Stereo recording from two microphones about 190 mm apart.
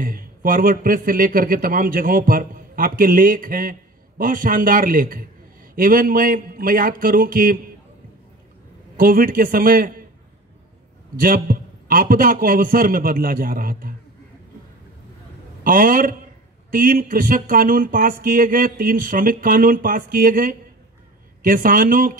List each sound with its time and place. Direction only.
0.0 s speech: 50° right (ahead or behind)
8.9 s speech: 50° right (ahead or behind)
11.1 s speech: 50° right (ahead or behind)
15.6 s speech: 50° right (ahead or behind)